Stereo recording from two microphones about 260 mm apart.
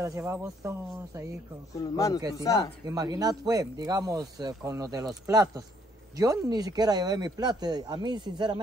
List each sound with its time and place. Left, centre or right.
0.0 s speech: centre
1.8 s a man's voice: centre
2.9 s speech: centre